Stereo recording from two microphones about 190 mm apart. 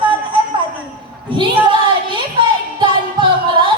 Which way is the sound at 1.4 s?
25° right (ahead or behind).